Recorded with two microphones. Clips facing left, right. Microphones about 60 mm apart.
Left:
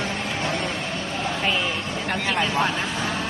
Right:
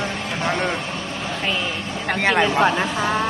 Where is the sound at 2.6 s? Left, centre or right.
Right.